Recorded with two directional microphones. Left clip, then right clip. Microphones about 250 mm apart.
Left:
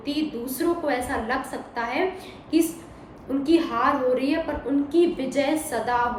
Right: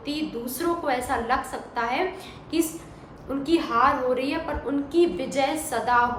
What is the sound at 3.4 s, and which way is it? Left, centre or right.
A woman's voice, centre.